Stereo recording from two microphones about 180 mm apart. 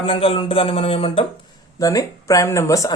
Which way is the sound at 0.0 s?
30° left (ahead or behind).